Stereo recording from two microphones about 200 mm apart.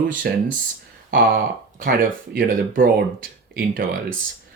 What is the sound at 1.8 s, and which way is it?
Speech, 45° right (ahead or behind).